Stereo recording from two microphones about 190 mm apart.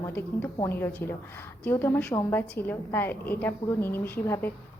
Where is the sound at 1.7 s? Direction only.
10° left (ahead or behind).